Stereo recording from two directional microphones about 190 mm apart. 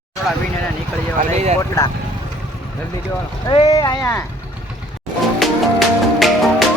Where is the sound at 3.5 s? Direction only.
25° left (ahead or behind).